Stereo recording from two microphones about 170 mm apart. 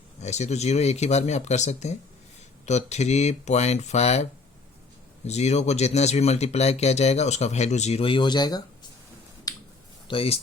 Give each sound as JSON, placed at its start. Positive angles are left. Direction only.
{"t": 0.2, "sound": "speech", "side_deg": 40}
{"t": 9.5, "sound": "finger snapping", "side_deg": 20}
{"t": 10.1, "sound": "speech", "side_deg": 35}